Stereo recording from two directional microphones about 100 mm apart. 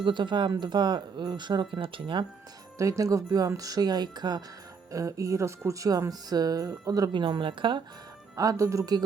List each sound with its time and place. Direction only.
0.0 s speech: 50° right (ahead or behind)
2.7 s speech: 35° right (ahead or behind)
7.1 s speech: 50° right (ahead or behind)
8.4 s speech: 35° right (ahead or behind)